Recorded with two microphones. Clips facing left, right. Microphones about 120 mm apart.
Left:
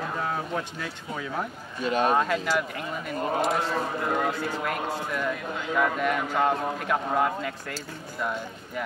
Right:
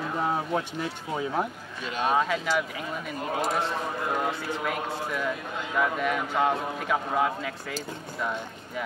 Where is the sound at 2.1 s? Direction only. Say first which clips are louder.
Right 4 dB; centre (ahead or behind).